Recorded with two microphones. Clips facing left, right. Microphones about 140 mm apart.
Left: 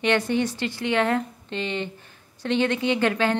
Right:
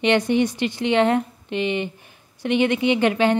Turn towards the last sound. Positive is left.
turn(degrees=-20)  # may be behind; listen again after turning